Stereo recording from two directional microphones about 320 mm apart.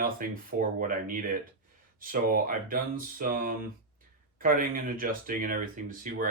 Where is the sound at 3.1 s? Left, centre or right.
Right.